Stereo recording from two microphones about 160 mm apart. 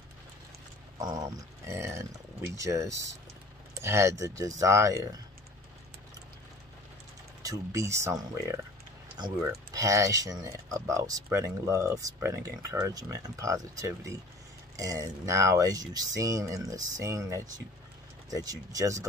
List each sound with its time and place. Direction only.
1.0 s speech: 20° right (ahead or behind)
7.4 s speech: 20° right (ahead or behind)